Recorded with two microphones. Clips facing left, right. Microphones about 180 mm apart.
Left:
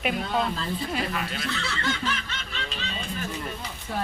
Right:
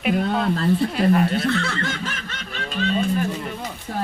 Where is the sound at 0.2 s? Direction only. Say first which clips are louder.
Right 6 dB; 55° right (ahead or behind).